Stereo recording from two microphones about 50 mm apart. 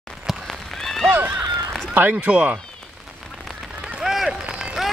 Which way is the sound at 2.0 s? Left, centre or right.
Right.